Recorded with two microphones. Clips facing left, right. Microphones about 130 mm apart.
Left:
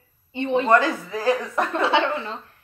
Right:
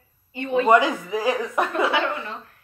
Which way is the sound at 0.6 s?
15° right (ahead or behind).